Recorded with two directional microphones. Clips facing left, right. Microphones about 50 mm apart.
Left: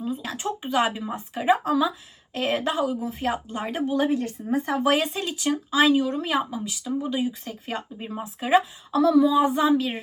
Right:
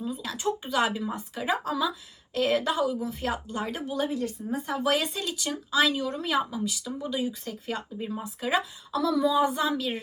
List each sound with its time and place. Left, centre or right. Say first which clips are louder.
0.0 s a sound: left 1 dB; left
0.6 s speech: left 5 dB; centre
4.6 s speech: left 5 dB; left
5.0 s speech: left 5 dB; left
7.8 s speech: left 1 dB; left
9.2 s speech: left 4 dB; centre